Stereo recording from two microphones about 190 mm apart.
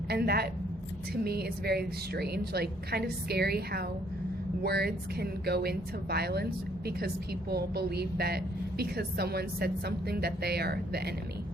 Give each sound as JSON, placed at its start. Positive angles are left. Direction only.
{"t": 0.1, "sound": "a woman's voice", "side_deg": -55}
{"t": 7.5, "sound": "a woman's voice", "side_deg": -55}